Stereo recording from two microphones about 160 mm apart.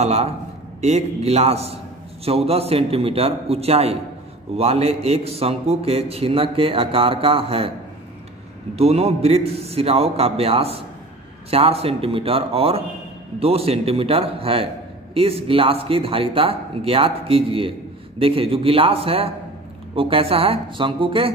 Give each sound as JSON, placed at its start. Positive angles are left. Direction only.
{"t": 0.0, "sound": "a man's voice", "side_deg": -40}
{"t": 8.7, "sound": "a man's voice", "side_deg": -40}